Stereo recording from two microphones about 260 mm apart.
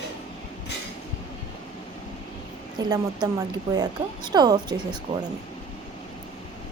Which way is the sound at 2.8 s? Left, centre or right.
Centre.